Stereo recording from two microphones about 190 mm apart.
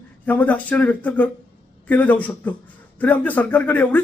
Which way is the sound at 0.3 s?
10° left (ahead or behind).